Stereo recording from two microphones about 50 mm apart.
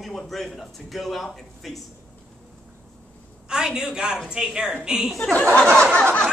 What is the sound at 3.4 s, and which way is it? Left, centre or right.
A woman's voice, centre.